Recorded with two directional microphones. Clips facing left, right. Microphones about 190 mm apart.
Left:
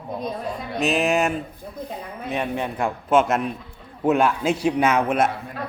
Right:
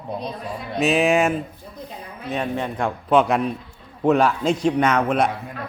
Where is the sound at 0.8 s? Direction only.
Centre (ahead or behind).